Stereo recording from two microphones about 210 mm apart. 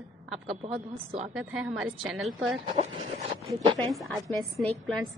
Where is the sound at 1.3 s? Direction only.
5° right (ahead or behind).